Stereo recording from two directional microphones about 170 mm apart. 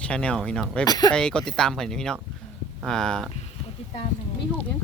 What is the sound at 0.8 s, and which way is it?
Speech, 20° left (ahead or behind).